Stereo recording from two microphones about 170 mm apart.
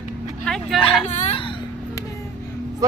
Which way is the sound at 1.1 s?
35° left (ahead or behind).